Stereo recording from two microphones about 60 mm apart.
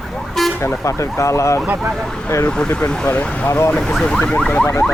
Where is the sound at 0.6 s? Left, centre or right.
Left.